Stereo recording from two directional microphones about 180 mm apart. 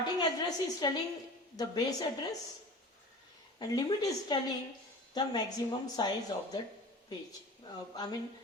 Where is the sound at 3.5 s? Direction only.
20° left (ahead or behind).